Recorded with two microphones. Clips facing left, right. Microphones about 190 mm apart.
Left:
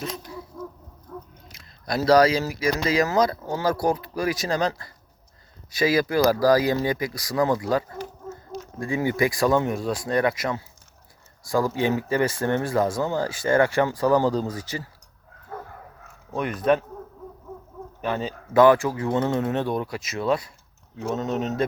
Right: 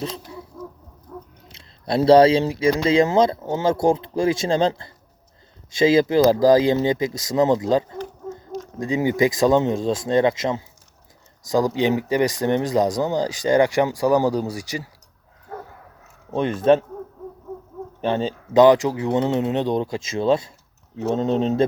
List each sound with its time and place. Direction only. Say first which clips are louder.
1.5 s speech: right 5 dB; 30° right (ahead or behind); by 14.8 s 15° right (ahead or behind)
16.3 s speech: right 5 dB; 25° right (ahead or behind)
18.0 s speech: right 5 dB; 25° right (ahead or behind)